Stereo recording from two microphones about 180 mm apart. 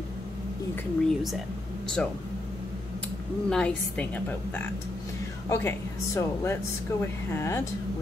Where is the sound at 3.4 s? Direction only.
5° left (ahead or behind).